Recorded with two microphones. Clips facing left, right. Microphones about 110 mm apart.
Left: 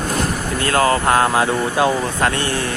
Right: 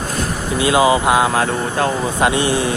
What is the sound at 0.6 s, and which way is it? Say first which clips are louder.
Speech: right 3 dB; 10° right (ahead or behind).